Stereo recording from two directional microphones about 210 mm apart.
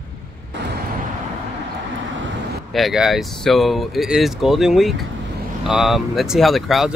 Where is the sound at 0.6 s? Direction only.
55° right (ahead or behind).